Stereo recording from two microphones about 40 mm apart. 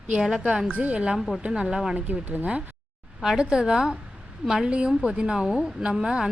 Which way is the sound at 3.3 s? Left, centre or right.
Centre.